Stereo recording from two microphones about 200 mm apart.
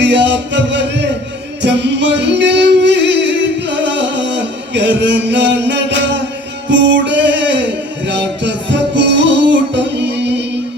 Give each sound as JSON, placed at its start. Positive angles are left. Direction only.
{"t": 0.0, "sound": "music", "side_deg": -60}